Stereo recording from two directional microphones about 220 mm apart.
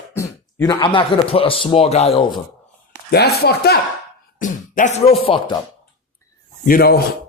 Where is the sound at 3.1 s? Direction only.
45° left (ahead or behind).